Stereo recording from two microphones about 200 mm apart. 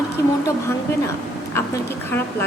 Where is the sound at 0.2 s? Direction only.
15° left (ahead or behind).